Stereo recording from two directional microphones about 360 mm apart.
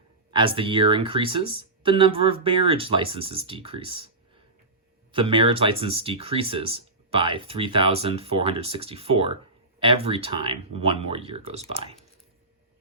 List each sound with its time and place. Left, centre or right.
0.3 s speech: centre
5.1 s speech: centre